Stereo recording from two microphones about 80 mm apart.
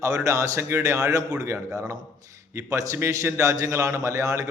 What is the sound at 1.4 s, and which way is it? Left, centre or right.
A man's voice, right.